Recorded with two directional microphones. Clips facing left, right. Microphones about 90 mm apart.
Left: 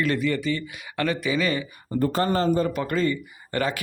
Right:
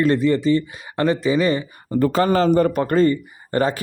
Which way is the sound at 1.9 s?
90° right.